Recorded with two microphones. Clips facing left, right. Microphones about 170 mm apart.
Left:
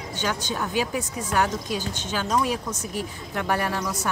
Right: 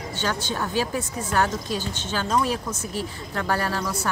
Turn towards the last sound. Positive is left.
turn(degrees=15)  # may be behind; listen again after turning